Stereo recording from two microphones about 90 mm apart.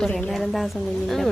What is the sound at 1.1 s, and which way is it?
Speech, centre (ahead or behind).